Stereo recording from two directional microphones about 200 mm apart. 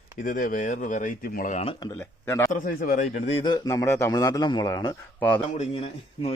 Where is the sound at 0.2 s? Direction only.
45° left (ahead or behind).